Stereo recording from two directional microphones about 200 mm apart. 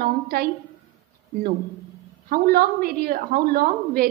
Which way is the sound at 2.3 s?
50° right (ahead or behind).